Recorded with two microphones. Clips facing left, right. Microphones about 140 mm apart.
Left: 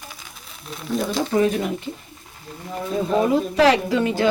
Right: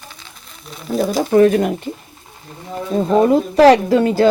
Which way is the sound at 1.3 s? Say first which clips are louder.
Right 9 dB; 60° right (ahead or behind).